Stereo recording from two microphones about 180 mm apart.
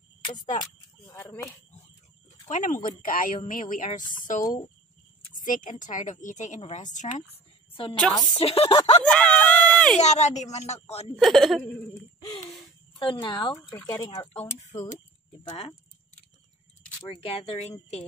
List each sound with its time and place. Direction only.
1.1 s speech: 10° left (ahead or behind)
2.5 s a woman's voice: 45° left (ahead or behind)
8.0 s speech: 5° left (ahead or behind)
8.4 s speech: 30° left (ahead or behind)
9.0 s speech: 5° left (ahead or behind)
9.9 s speech: 40° left (ahead or behind)
11.1 s speech: centre (ahead or behind)
13.0 s speech: 25° left (ahead or behind)
17.1 s speech: 35° left (ahead or behind)